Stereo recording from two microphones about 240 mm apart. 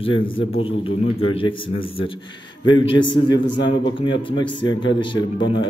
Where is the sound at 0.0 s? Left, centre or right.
Left.